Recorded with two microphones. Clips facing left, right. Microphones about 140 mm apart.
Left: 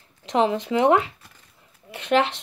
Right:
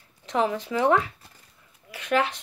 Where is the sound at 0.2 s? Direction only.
20° left (ahead or behind).